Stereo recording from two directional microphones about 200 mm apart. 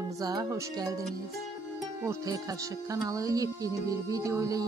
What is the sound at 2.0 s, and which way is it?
Speech, 20° right (ahead or behind).